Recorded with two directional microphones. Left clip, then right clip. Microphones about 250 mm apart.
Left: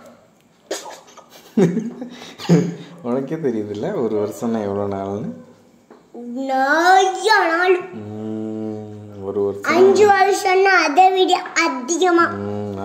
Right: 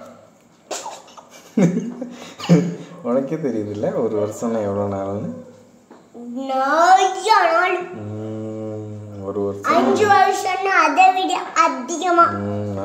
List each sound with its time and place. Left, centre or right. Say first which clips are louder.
1.5 s speech: left 2 dB; left
6.3 s a child's voice: left 1 dB; left
9.2 s a child's voice: left 2 dB; left
11.6 s a child's voice: right 1 dB; left
12.0 s a child's voice: right 1 dB; left